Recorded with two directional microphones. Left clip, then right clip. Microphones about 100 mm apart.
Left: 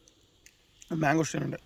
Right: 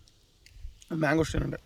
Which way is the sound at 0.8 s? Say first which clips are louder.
Even; 10° right (ahead or behind).